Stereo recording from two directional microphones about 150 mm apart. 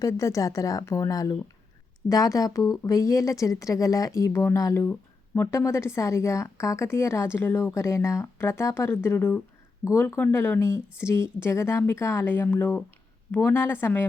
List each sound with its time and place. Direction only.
0.0 s a woman's voice: 20° left (ahead or behind)